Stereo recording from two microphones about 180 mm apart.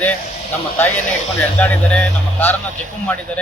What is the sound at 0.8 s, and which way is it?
Speech, 10° left (ahead or behind).